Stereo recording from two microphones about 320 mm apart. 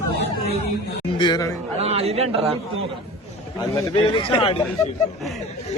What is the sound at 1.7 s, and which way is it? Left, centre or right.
Speech, centre.